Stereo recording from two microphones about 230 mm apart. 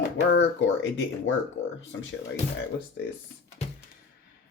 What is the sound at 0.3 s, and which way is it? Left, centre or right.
Speech, left.